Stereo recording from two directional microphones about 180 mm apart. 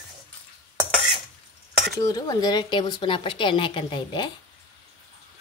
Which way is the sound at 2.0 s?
20° left (ahead or behind).